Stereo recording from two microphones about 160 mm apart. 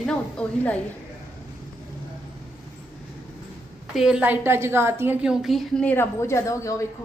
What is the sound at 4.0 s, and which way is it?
A woman's voice, 5° right (ahead or behind).